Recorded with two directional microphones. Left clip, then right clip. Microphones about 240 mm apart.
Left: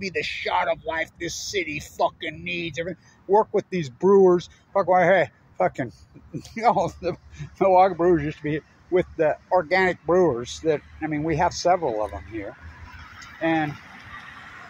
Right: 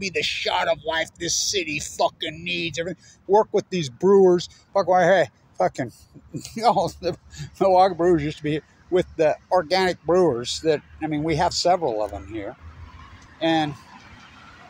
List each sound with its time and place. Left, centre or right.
0.0 s speech: right
3.5 s speech: right; by 10.4 s centre
10.4 s speech: right
12.8 s honk: left
13.4 s speech: centre
13.7 s a sound: left